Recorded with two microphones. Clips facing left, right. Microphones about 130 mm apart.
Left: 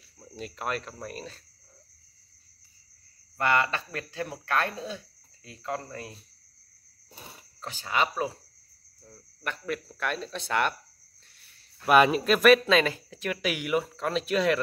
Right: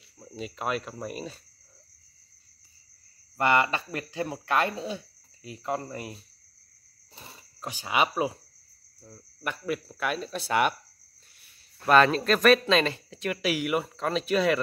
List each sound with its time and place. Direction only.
0.2 s speech: centre (ahead or behind)
3.3 s speech: 15° right (ahead or behind)
7.2 s cricket: 10° left (ahead or behind)
7.6 s speech: 10° right (ahead or behind)
11.8 s speech: 10° left (ahead or behind)